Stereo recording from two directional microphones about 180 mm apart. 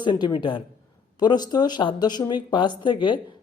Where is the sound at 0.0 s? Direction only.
25° left (ahead or behind).